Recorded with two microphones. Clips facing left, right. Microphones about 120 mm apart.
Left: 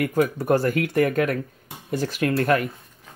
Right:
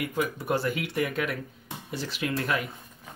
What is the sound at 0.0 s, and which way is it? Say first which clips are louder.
Speech: left 8 dB; 45° left (ahead or behind).